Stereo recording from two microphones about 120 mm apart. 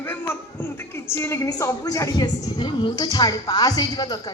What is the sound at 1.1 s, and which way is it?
A woman's voice, 20° left (ahead or behind).